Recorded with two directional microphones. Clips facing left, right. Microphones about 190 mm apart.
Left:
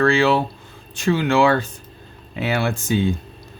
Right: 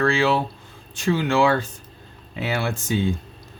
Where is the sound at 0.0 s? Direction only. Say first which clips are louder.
Left 3 dB; 65° left (ahead or behind).